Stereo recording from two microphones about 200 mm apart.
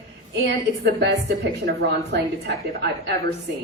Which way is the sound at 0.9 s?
55° right (ahead or behind).